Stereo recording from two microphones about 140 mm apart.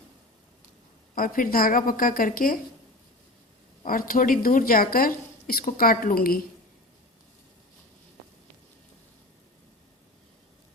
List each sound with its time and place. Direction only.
1.1 s a woman's voice: 85° left
3.8 s a woman's voice: 90° left